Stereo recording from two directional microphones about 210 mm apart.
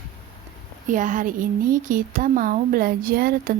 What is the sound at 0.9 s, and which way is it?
A woman's voice, 40° right (ahead or behind).